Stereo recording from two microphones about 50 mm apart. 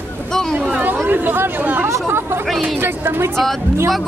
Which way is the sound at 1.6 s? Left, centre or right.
Right.